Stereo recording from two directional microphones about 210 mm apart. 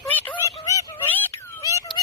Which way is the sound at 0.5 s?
20° left (ahead or behind).